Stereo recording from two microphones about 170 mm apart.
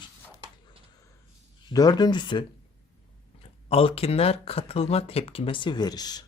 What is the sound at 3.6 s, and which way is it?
Speech, 35° left (ahead or behind).